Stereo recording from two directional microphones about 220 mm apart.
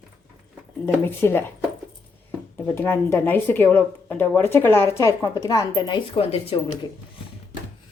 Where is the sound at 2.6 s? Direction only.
10° left (ahead or behind).